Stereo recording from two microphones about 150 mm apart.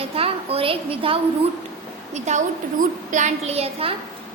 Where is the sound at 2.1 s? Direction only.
50° right (ahead or behind).